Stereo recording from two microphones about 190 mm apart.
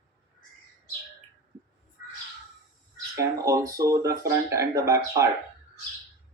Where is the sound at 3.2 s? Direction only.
15° right (ahead or behind).